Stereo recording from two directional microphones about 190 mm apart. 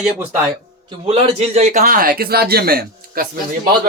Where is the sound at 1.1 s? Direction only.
35° right (ahead or behind).